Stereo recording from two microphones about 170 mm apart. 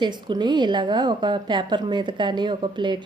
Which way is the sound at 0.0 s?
25° right (ahead or behind).